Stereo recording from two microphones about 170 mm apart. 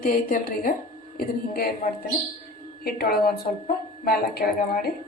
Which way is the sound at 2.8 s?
65° left (ahead or behind).